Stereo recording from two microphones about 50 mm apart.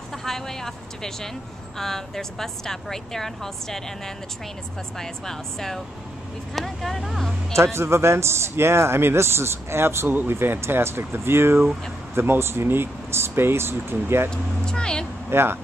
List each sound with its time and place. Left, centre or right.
0.1 s a woman's voice: centre
7.5 s speech: right
10.0 s speech: right
10.3 s speech: right
14.3 s a woman's voice: centre
15.2 s speech: right